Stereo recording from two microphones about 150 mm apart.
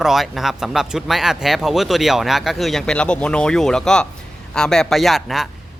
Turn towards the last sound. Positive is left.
turn(degrees=0)  # may be behind; listen again after turning